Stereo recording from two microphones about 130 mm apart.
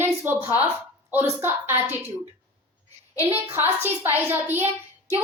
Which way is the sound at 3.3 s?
15° right (ahead or behind).